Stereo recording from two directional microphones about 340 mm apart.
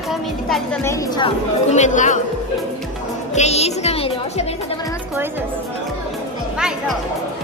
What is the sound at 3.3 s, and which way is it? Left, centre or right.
Music, centre.